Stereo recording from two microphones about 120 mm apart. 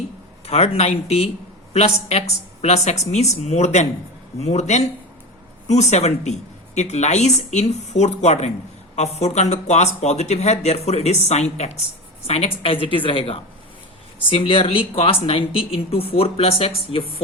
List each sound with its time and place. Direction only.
0.4 s speech: 55° left (ahead or behind)
12.3 s speech: 55° left (ahead or behind)